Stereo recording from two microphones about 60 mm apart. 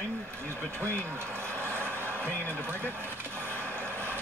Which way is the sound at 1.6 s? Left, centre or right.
Right.